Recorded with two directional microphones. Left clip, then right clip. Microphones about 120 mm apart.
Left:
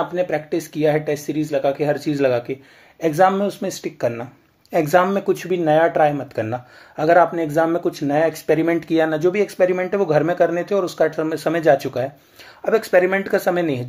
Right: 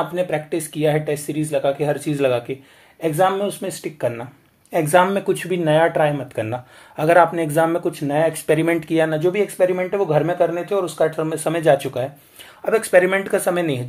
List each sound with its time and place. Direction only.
0.1 s speech: 20° left (ahead or behind)
3.6 s speech: 10° left (ahead or behind)
7.8 s speech: 15° left (ahead or behind)
8.5 s speech: centre (ahead or behind)
8.7 s speech: 10° left (ahead or behind)
9.2 s speech: 25° left (ahead or behind)
11.6 s speech: 20° left (ahead or behind)
12.6 s speech: 10° left (ahead or behind)